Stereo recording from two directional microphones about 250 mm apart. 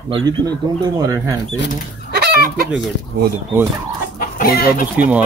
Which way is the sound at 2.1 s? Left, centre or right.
Right.